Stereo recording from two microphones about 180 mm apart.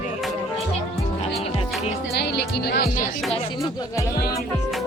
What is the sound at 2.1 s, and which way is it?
Speech, 65° left (ahead or behind).